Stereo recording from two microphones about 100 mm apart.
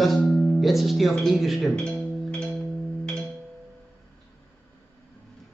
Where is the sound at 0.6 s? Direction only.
Centre (ahead or behind).